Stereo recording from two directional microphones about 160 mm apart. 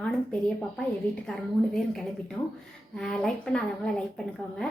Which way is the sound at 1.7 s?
5° left (ahead or behind).